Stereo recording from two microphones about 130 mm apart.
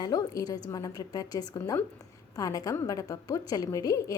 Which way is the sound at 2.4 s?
30° left (ahead or behind).